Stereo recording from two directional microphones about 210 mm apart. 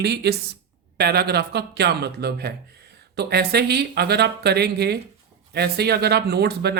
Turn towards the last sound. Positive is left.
turn(degrees=-50)  # may be behind; listen again after turning